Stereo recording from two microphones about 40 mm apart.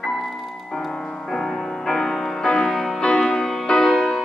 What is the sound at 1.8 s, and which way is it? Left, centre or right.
Music, centre.